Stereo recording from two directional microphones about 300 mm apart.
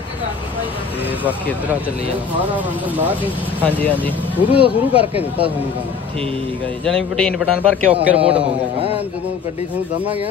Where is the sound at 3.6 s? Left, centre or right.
Centre.